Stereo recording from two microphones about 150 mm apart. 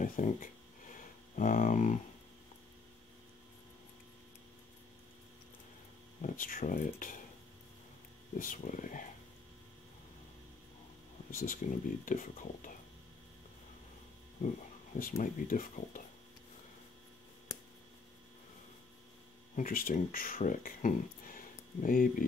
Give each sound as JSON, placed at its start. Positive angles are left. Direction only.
{"t": 0.0, "sound": "a sound", "side_deg": 60}
{"t": 6.2, "sound": "speech", "side_deg": 65}
{"t": 8.4, "sound": "speech", "side_deg": 65}
{"t": 11.2, "sound": "speech", "side_deg": 65}
{"t": 14.4, "sound": "speech", "side_deg": 60}
{"t": 19.5, "sound": "speech", "side_deg": 65}